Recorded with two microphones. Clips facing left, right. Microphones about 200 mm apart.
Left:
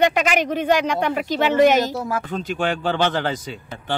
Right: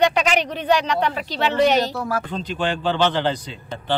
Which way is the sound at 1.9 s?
20° left (ahead or behind).